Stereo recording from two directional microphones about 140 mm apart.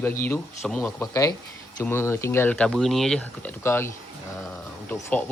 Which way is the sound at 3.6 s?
15° left (ahead or behind).